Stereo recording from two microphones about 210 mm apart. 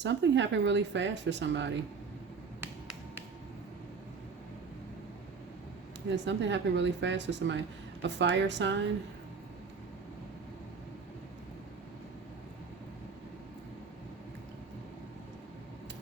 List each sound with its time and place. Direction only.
0.0 s speech: 60° right (ahead or behind)
2.6 s finger snapping: 10° right (ahead or behind)
6.1 s speech: 60° right (ahead or behind)